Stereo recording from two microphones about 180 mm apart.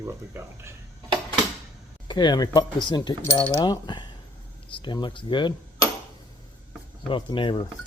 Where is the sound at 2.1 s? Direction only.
25° left (ahead or behind).